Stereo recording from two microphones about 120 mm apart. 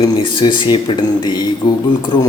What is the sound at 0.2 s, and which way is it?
A man's voice, 40° left (ahead or behind).